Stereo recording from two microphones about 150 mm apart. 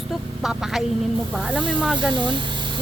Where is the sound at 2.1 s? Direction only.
30° right (ahead or behind).